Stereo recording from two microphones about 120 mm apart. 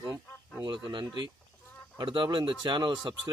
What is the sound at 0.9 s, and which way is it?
Speech, 45° right (ahead or behind).